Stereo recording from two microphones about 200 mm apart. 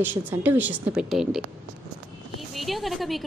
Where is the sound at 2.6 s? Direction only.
Centre (ahead or behind).